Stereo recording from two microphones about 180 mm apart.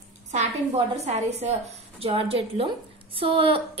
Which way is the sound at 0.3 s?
40° right (ahead or behind).